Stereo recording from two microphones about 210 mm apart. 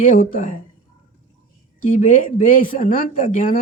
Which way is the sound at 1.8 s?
40° left (ahead or behind).